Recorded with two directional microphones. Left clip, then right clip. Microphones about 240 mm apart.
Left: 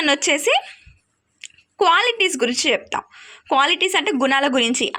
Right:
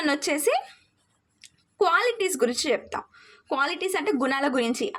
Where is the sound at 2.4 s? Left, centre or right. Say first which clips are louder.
Left 5 dB; centre.